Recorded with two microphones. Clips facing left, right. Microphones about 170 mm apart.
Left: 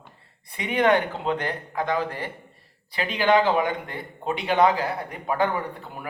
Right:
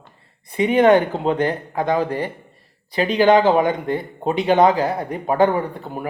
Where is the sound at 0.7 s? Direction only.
45° right (ahead or behind).